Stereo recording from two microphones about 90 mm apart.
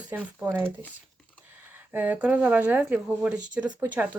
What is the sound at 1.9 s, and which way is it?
Speech, 20° right (ahead or behind).